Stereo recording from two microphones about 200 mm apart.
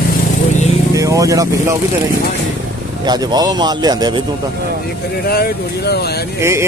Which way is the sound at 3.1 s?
20° right (ahead or behind).